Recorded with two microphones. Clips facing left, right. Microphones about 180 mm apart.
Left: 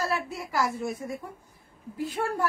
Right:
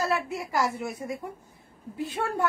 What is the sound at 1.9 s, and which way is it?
Speech, 20° right (ahead or behind).